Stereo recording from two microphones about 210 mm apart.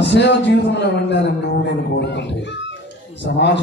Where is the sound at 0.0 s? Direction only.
55° left (ahead or behind).